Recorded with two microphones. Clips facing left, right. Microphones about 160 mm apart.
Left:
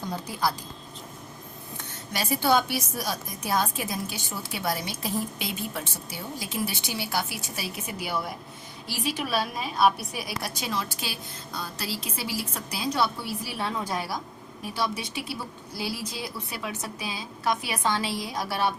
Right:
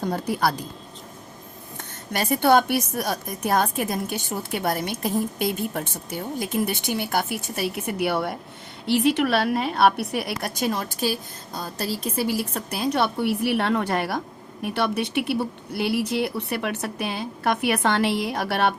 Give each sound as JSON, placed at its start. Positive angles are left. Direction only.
{"t": 0.0, "sound": "a woman's voice", "side_deg": -60}
{"t": 2.1, "sound": "a woman's voice", "side_deg": -55}